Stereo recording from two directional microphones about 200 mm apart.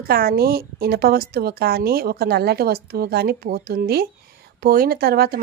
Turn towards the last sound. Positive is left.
turn(degrees=-50)  # may be behind; listen again after turning